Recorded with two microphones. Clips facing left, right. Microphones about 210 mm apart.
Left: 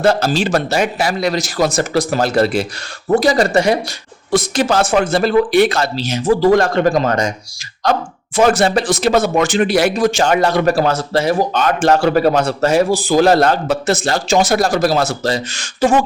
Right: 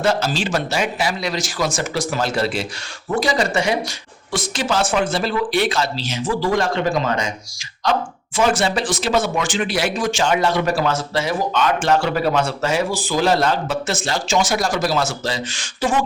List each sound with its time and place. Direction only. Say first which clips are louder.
0.1 s speech: left 5 dB; 40° left (ahead or behind)
5.1 s speech: left 8 dB; 55° left (ahead or behind)
8.4 s speech: left 5 dB; 45° left (ahead or behind)
9.4 s speech: left 8 dB; 65° left (ahead or behind)
9.7 s speech: left 6 dB; 40° left (ahead or behind)